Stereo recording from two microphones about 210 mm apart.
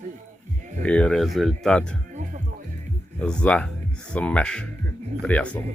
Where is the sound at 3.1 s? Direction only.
5° left (ahead or behind).